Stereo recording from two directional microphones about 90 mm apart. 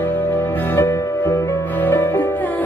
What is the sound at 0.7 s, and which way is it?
Music, 25° left (ahead or behind).